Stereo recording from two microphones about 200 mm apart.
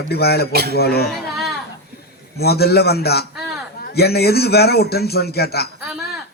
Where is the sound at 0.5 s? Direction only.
50° right (ahead or behind).